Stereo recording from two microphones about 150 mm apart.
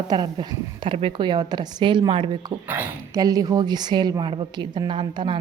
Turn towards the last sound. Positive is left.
turn(degrees=-30)  # may be behind; listen again after turning